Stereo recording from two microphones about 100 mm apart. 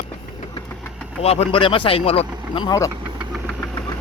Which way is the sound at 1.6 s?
60° left (ahead or behind).